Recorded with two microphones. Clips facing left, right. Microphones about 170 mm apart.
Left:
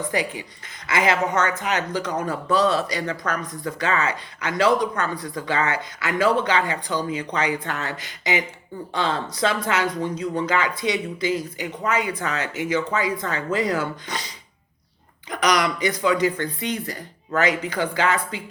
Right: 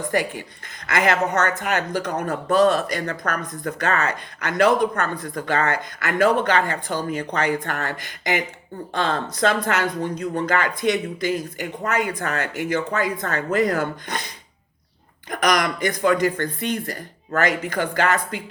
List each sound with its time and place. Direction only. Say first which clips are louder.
0.1 s speech: right 2 dB; 50° right (ahead or behind)
15.3 s speech: even; 50° right (ahead or behind)